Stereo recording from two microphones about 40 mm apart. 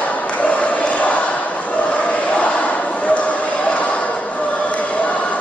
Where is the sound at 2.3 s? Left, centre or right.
Left.